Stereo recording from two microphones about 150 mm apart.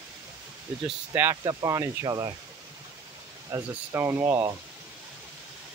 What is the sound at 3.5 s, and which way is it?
Speech, 15° right (ahead or behind).